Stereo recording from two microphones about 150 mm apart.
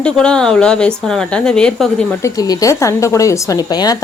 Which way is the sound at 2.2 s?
20° left (ahead or behind).